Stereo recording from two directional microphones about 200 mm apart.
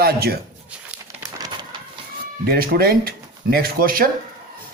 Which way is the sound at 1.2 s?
20° right (ahead or behind).